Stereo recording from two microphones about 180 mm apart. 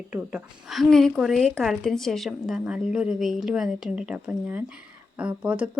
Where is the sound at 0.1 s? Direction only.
5° right (ahead or behind).